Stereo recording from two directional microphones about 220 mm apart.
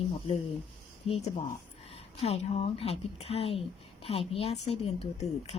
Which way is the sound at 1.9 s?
25° left (ahead or behind).